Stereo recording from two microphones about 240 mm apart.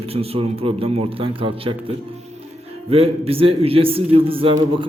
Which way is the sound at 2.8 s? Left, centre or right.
Right.